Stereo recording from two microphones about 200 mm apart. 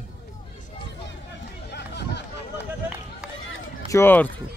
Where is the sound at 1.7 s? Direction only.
55° left (ahead or behind).